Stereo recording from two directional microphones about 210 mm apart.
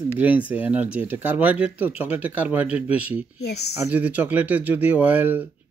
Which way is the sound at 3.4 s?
50° left (ahead or behind).